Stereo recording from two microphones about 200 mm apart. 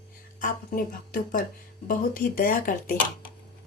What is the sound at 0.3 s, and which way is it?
Female singing, 40° left (ahead or behind).